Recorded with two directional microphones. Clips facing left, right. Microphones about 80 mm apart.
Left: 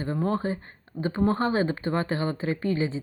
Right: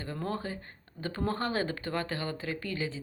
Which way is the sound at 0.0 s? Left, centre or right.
Left.